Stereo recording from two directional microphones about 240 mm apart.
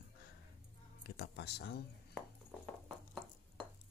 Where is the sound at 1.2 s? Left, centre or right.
Left.